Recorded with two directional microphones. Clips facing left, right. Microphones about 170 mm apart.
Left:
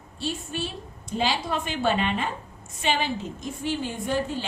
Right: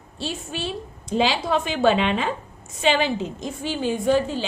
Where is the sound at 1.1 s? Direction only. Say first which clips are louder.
Right 5 dB; 90° right.